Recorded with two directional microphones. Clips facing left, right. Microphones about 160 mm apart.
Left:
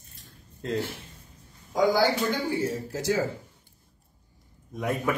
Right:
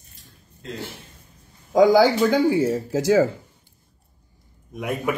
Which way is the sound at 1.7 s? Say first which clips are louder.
Right 8 dB; 90° right.